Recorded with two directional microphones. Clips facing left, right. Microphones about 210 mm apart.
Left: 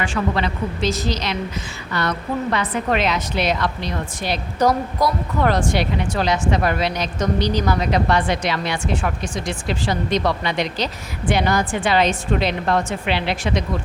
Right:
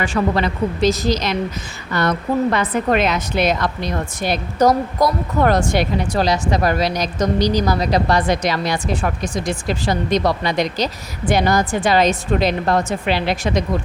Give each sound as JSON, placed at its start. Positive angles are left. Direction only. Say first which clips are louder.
{"t": 0.0, "sound": "a woman's voice", "louder": "right 3 dB", "side_deg": -40}